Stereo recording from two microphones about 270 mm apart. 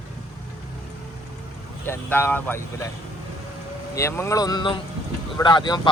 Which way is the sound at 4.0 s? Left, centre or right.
Centre.